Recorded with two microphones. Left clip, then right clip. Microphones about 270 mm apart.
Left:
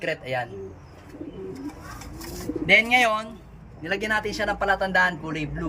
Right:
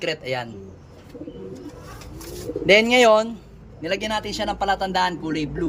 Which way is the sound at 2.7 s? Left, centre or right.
Centre.